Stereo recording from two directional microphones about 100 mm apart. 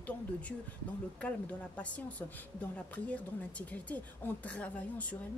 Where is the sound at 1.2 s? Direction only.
15° left (ahead or behind).